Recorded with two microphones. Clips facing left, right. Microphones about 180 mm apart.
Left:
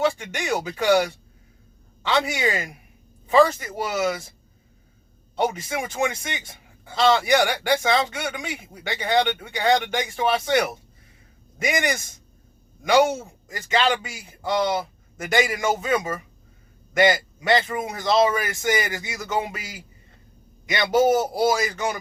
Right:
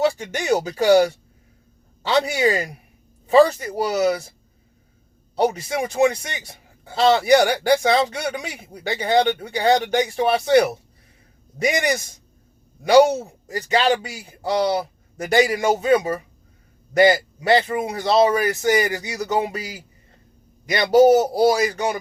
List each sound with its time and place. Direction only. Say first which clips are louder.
0.0 s a man's voice: right 3 dB; 40° right (ahead or behind)
5.4 s a man's voice: right 4 dB; 40° right (ahead or behind)